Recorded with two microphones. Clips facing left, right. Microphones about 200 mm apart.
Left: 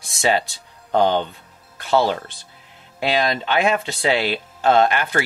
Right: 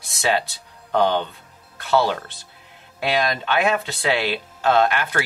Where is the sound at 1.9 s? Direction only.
20° left (ahead or behind).